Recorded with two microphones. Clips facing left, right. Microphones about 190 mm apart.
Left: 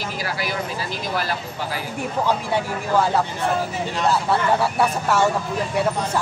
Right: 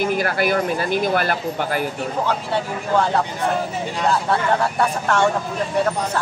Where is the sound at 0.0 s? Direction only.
55° right (ahead or behind).